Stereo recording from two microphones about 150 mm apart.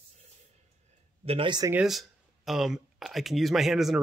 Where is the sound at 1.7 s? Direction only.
5° right (ahead or behind).